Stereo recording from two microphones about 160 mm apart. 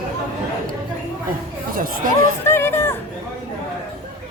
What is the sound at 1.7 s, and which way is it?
Speech, 60° right (ahead or behind).